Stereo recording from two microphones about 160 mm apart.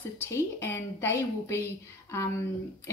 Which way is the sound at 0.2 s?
15° left (ahead or behind).